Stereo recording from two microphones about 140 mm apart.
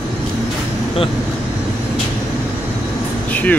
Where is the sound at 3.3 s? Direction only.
10° left (ahead or behind).